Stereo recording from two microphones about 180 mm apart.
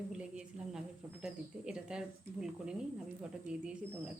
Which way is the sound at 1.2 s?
5° right (ahead or behind).